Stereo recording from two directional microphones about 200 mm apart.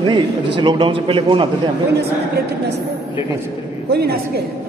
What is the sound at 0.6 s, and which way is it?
Speech, 25° right (ahead or behind).